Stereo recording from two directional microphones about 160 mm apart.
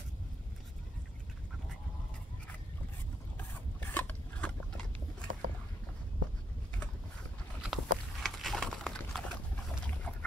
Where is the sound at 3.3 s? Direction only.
10° left (ahead or behind).